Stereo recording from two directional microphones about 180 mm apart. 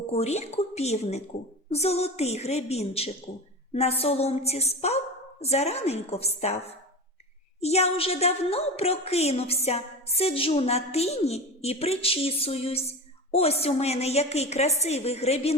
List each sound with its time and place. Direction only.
0.1 s a woman's voice: 35° left (ahead or behind)
7.6 s a woman's voice: 35° left (ahead or behind)